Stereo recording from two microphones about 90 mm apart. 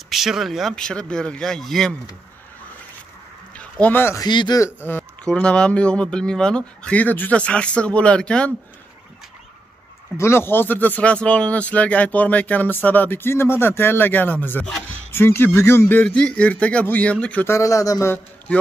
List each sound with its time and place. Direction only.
0.1 s speech: 5° right (ahead or behind)
3.8 s speech: 25° left (ahead or behind)
4.2 s speech: 55° left (ahead or behind)
4.8 s speech: 15° left (ahead or behind)
10.1 s speech: 30° left (ahead or behind)
17.5 s speech: 35° left (ahead or behind)